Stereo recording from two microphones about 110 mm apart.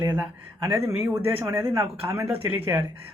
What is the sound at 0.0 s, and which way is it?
Speech, 25° right (ahead or behind).